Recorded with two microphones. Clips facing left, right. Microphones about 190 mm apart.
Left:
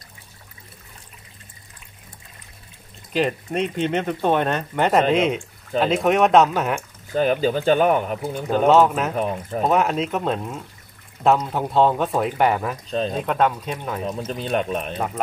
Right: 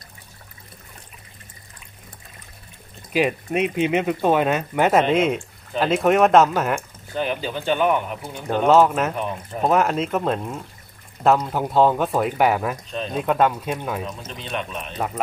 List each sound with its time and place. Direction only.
3.1 s speech: 10° right (ahead or behind)
7.2 s speech: 40° left (ahead or behind)
8.5 s speech: centre (ahead or behind)
14.0 s speech: 40° left (ahead or behind)
15.0 s speech: centre (ahead or behind)